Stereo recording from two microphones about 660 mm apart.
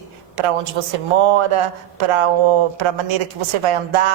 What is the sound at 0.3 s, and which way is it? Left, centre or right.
A woman's voice, right.